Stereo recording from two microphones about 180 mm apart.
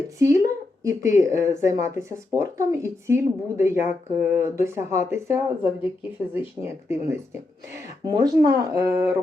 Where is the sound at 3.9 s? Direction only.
40° left (ahead or behind).